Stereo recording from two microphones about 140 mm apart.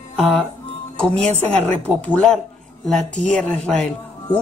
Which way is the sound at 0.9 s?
5° left (ahead or behind).